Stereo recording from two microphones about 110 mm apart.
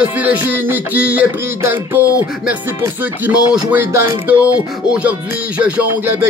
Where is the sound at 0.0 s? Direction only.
15° right (ahead or behind).